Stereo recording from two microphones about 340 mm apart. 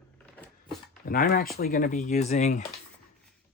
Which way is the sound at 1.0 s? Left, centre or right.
Left.